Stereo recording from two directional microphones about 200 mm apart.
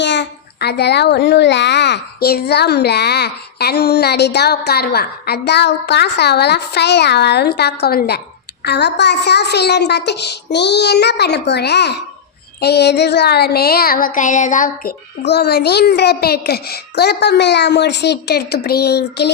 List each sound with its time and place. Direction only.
0.0 s a child's voice: 60° left (ahead or behind)
12.5 s a sound: 55° left (ahead or behind)
15.2 s a child's voice: 55° left (ahead or behind)